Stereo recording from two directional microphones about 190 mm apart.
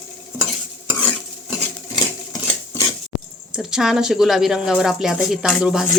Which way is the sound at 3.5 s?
5° right (ahead or behind).